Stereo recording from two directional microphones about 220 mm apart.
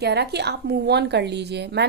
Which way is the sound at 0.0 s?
50° right (ahead or behind).